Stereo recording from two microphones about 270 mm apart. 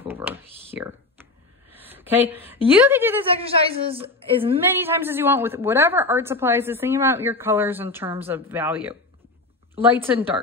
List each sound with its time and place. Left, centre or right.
0.1 s a sound: centre
1.7 s a woman's voice: centre
3.4 s a woman's voice: right
4.6 s a woman's voice: centre